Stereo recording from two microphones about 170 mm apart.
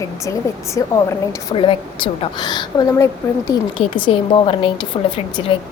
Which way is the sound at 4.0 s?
30° left (ahead or behind).